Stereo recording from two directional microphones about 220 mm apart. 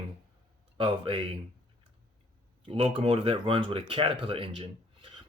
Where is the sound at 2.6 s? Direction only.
25° right (ahead or behind).